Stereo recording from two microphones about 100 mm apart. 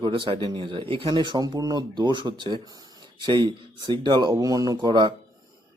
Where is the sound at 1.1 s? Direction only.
45° right (ahead or behind).